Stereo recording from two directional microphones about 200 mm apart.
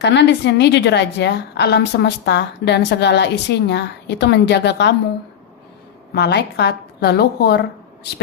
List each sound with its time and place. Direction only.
0.0 s a woman's voice: 60° left (ahead or behind)
6.1 s a woman's voice: 55° left (ahead or behind)